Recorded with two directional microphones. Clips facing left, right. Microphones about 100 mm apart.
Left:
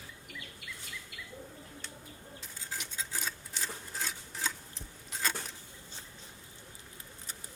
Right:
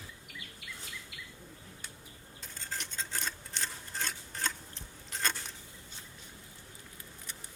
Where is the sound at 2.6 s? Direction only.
5° left (ahead or behind).